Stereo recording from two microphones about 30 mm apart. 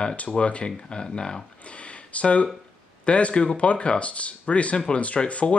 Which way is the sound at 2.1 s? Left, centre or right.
Left.